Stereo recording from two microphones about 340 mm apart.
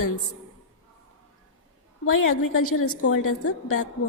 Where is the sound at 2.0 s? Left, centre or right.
Left.